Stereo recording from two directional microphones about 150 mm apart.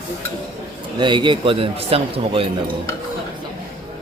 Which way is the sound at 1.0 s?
30° right (ahead or behind).